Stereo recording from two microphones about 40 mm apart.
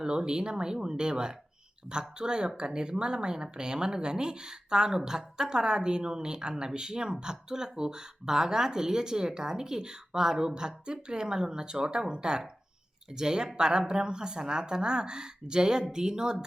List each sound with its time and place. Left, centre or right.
0.0 s speech: centre